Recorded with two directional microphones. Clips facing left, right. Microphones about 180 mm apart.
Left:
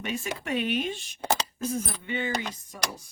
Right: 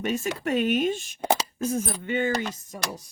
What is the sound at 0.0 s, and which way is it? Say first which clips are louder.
Speech: right 6 dB; 45° right (ahead or behind).